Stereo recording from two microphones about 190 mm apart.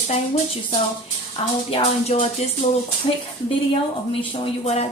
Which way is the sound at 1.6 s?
35° left (ahead or behind).